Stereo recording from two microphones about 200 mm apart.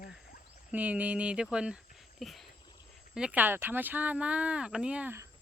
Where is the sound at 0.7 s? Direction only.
5° right (ahead or behind).